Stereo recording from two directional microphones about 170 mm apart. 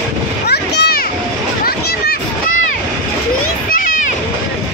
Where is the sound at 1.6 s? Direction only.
65° left (ahead or behind).